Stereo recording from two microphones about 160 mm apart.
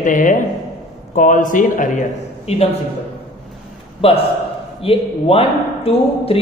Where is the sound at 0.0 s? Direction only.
55° left (ahead or behind).